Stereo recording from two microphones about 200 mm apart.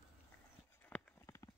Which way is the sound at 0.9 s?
15° left (ahead or behind).